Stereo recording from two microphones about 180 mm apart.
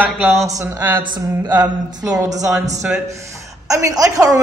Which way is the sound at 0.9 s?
25° right (ahead or behind).